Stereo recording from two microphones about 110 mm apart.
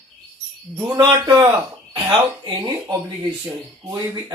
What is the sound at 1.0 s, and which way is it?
Speech, 40° right (ahead or behind).